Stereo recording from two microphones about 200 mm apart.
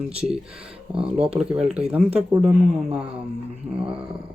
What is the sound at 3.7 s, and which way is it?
Speech, 15° right (ahead or behind).